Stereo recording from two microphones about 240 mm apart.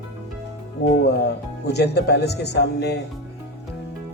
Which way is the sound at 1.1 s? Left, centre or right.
Left.